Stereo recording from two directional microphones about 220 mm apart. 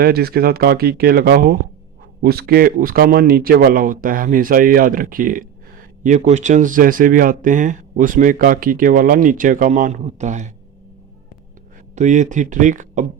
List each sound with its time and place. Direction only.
0.0 s speech: 45° right (ahead or behind)
11.9 s speech: 35° right (ahead or behind)